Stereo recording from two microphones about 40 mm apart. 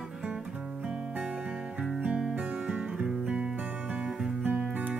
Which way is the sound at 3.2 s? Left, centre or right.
Right.